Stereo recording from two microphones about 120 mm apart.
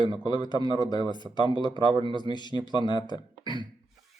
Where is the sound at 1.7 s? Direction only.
45° right (ahead or behind).